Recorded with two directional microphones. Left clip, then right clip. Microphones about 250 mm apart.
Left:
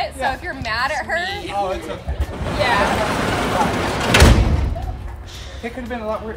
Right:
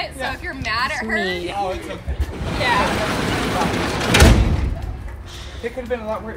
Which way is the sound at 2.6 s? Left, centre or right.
Left.